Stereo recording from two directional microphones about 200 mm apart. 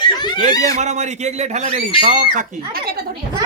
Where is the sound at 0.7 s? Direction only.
35° right (ahead or behind).